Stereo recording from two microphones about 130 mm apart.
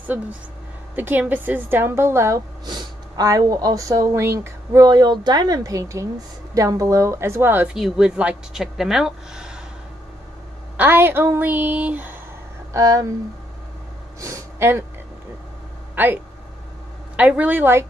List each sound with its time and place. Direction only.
0.0 s speech: 10° right (ahead or behind)
7.7 s speech: 5° right (ahead or behind)
10.8 s speech: 15° right (ahead or behind)
12.7 s speech: 25° right (ahead or behind)
14.2 s a sound: 20° right (ahead or behind)
15.9 s speech: 15° right (ahead or behind)
17.2 s speech: 10° right (ahead or behind)